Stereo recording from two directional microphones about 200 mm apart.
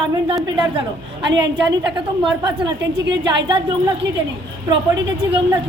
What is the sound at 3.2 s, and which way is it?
Speech, 20° right (ahead or behind).